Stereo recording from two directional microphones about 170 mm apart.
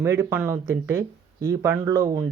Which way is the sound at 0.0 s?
15° right (ahead or behind).